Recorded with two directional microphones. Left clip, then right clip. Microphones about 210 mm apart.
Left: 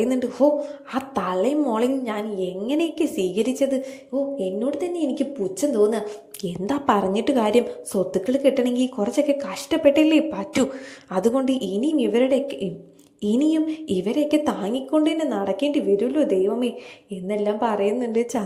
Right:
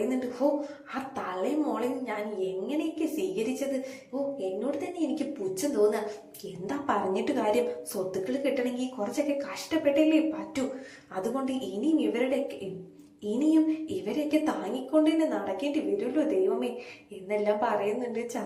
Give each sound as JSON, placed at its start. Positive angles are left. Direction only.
{"t": 0.1, "sound": "a woman's voice", "side_deg": 40}